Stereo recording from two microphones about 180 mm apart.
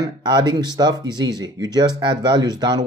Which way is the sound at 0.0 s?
20° right (ahead or behind).